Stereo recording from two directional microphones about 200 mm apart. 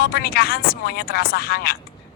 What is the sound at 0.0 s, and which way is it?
Speech, 50° left (ahead or behind).